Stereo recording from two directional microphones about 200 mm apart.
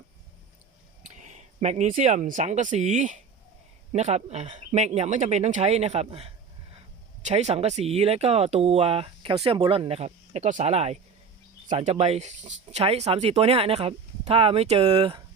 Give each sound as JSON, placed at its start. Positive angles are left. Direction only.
{"t": 1.0, "sound": "speech", "side_deg": -35}